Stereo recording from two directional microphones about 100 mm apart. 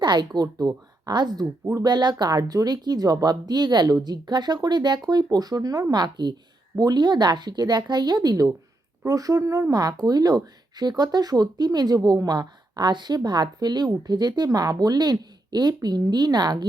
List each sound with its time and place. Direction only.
0.0 s speech: 45° right (ahead or behind)